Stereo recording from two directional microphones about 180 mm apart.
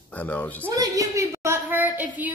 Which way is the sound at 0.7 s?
15° right (ahead or behind).